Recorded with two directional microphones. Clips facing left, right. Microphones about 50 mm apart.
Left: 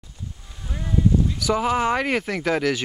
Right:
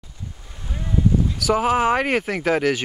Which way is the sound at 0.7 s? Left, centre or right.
Centre.